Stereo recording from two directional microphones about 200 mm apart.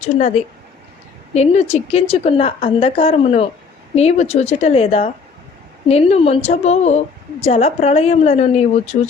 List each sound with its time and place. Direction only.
0.4 s a woman's voice: 30° left (ahead or behind)